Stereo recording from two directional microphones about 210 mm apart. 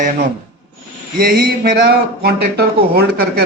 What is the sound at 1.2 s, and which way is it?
Speech, 45° right (ahead or behind).